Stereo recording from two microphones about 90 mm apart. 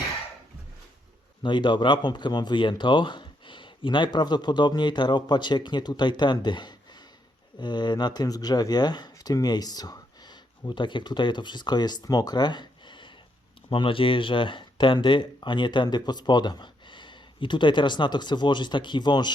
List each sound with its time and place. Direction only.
1.4 s speech: 60° left (ahead or behind)
13.7 s speech: 75° left (ahead or behind); by 19.3 s 55° left (ahead or behind)